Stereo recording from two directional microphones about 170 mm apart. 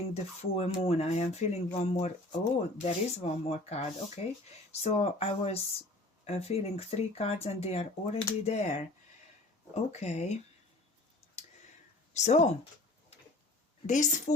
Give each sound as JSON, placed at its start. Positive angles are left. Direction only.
{"t": 0.1, "sound": "speech", "side_deg": 40}
{"t": 9.7, "sound": "speech", "side_deg": 40}
{"t": 12.1, "sound": "speech", "side_deg": 40}
{"t": 13.8, "sound": "a woman's voice", "side_deg": 45}